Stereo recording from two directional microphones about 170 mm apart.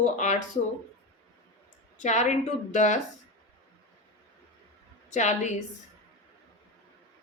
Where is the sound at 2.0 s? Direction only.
45° left (ahead or behind).